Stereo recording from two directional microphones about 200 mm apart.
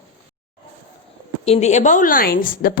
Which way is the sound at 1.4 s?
30° left (ahead or behind).